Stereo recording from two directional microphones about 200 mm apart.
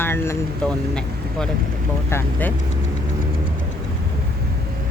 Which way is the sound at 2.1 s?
10° left (ahead or behind).